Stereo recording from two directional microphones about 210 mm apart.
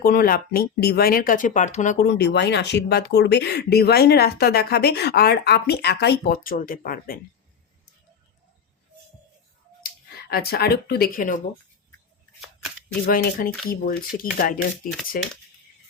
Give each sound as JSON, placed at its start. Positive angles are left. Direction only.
{"t": 0.0, "sound": "speech", "side_deg": 45}
{"t": 9.8, "sound": "speech", "side_deg": 45}
{"t": 13.1, "sound": "speech", "side_deg": 45}